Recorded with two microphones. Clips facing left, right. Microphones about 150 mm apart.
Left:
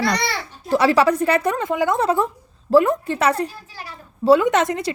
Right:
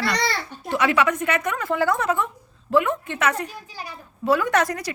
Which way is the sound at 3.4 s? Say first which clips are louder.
Left 1 dB; 15° right (ahead or behind).